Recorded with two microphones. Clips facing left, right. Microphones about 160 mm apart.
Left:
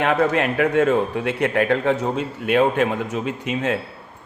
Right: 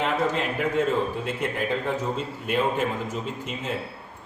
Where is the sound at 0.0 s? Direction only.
70° left (ahead or behind).